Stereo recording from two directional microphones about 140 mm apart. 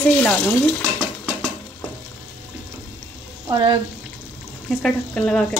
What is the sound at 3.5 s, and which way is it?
Speech, 35° right (ahead or behind).